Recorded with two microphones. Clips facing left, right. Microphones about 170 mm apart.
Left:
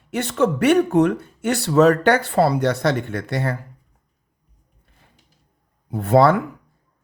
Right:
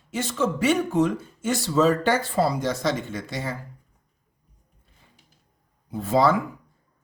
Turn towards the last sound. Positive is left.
turn(degrees=60)  # may be behind; listen again after turning